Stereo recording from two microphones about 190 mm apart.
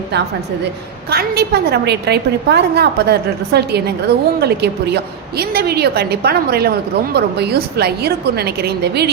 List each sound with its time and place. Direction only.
1.1 s a woman's voice: 55° right (ahead or behind)